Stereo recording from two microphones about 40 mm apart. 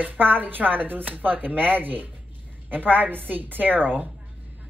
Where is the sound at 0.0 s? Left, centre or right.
Right.